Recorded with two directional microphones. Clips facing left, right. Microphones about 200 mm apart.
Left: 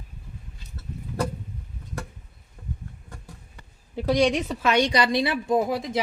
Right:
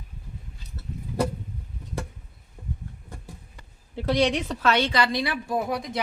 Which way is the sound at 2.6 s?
15° right (ahead or behind).